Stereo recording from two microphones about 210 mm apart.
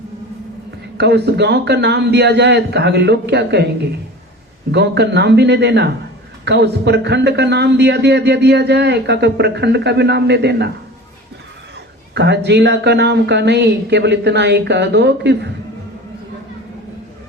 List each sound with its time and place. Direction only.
0.9 s a man's voice: 55° right (ahead or behind)
4.7 s a man's voice: 55° right (ahead or behind)
12.1 s speech: 55° right (ahead or behind)